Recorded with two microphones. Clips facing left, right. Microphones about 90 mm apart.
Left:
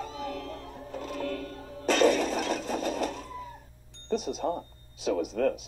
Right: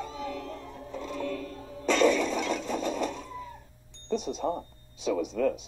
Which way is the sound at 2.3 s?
40° left (ahead or behind).